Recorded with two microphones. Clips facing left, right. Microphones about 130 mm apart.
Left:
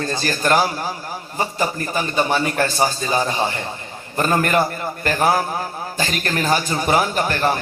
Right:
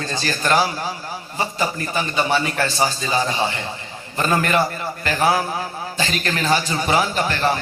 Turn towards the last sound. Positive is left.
turn(degrees=45)  # may be behind; listen again after turning